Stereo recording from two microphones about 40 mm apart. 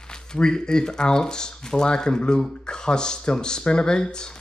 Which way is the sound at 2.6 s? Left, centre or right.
Left.